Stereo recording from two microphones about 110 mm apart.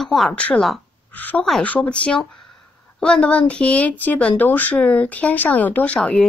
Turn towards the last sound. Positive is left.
turn(degrees=5)  # may be behind; listen again after turning